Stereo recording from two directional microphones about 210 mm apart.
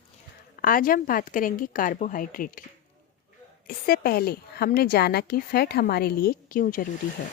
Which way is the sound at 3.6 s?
45° left (ahead or behind).